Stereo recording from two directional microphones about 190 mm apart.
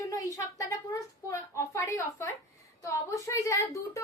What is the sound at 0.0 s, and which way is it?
A woman's voice, 20° left (ahead or behind).